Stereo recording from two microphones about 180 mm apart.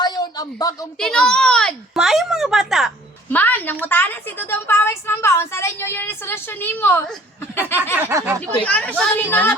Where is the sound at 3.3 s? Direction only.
10° left (ahead or behind).